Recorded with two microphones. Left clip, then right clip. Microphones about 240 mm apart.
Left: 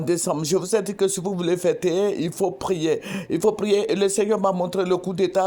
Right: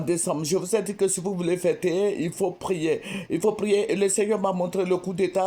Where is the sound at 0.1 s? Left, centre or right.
Left.